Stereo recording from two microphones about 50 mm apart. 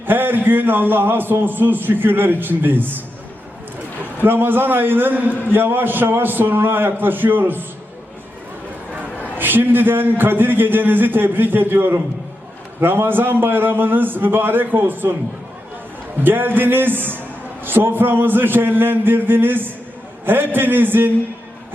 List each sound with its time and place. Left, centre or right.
0.0 s a man's voice: right
4.2 s a man's voice: right
9.4 s a man's voice: right
16.2 s a man's voice: right